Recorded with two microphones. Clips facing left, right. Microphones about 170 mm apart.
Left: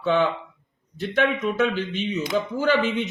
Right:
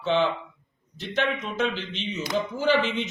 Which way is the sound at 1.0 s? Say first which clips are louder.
Left 5 dB; 55° left (ahead or behind).